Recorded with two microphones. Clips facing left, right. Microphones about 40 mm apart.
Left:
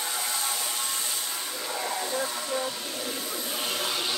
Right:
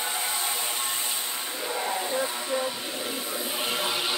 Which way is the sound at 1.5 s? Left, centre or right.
Right.